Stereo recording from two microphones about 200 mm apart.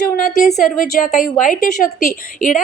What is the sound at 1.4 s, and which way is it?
Speech, 40° left (ahead or behind).